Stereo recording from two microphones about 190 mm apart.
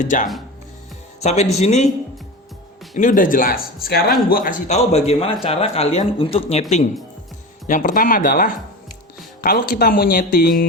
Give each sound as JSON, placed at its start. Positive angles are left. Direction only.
{"t": 0.0, "sound": "a man's voice", "side_deg": 40}
{"t": 2.9, "sound": "a man's voice", "side_deg": 45}